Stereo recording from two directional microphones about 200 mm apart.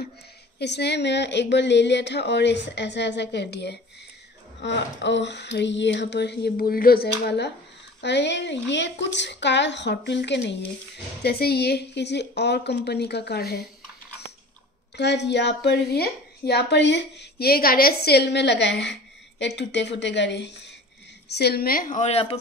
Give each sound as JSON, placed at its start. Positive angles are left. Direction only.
{"t": 0.6, "sound": "a woman's voice", "side_deg": 55}
{"t": 15.0, "sound": "a woman's voice", "side_deg": 60}